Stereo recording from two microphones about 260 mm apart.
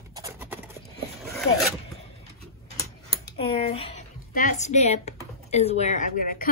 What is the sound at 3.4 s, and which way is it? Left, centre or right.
Speech, left.